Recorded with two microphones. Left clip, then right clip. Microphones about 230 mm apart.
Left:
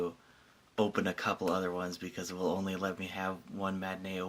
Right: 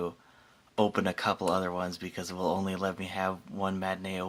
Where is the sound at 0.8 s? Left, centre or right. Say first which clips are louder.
Right 4 dB; right.